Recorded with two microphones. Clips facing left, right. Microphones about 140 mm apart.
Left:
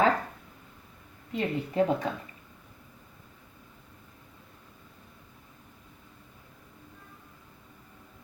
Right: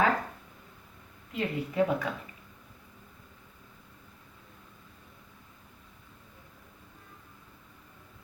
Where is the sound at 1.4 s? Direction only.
30° left (ahead or behind).